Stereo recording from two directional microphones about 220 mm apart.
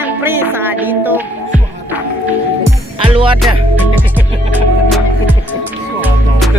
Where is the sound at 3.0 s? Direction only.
25° right (ahead or behind).